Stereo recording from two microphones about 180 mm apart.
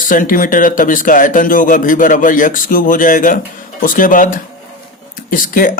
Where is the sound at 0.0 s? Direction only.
50° left (ahead or behind).